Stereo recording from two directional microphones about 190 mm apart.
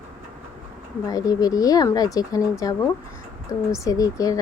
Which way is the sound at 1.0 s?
20° left (ahead or behind).